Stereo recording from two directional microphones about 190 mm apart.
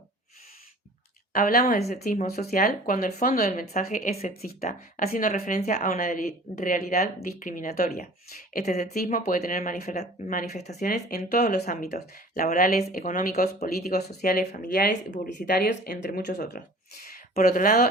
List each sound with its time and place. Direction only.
1.3 s speech: 50° left (ahead or behind)
8.5 s a woman's voice: 35° left (ahead or behind)
8.8 s speech: 50° left (ahead or behind)
10.9 s speech: 55° left (ahead or behind)